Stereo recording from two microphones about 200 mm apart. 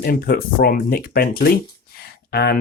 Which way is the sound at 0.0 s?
50° left (ahead or behind).